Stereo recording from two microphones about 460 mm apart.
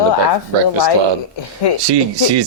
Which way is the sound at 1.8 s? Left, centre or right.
Right.